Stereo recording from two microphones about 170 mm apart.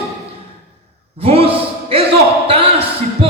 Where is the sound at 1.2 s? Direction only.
35° right (ahead or behind).